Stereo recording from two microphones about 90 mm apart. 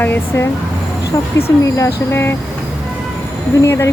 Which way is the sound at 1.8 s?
30° left (ahead or behind).